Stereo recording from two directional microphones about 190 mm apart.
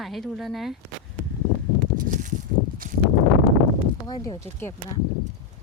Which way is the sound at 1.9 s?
45° right (ahead or behind).